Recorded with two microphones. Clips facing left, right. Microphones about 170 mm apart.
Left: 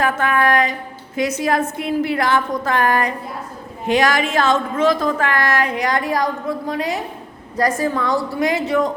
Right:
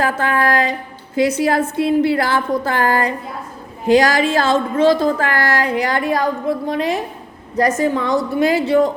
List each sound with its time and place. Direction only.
0.0 s a woman's voice: 30° right (ahead or behind)
7.5 s a woman's voice: 25° right (ahead or behind)